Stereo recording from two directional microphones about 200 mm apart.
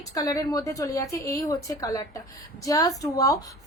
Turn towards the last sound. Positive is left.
turn(degrees=15)  # may be behind; listen again after turning